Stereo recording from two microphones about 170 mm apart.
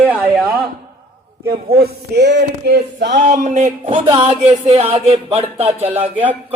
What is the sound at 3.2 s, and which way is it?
Speech, 50° right (ahead or behind).